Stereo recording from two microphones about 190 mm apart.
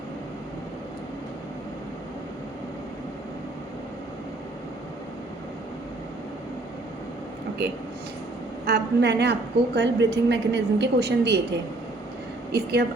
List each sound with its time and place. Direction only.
8.6 s a woman's voice: 60° right (ahead or behind)
12.5 s a woman's voice: 55° right (ahead or behind)